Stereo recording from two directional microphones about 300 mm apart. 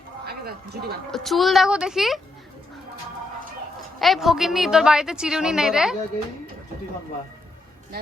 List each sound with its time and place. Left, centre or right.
0.3 s speech: right
1.1 s a woman's voice: centre
4.0 s a woman's voice: centre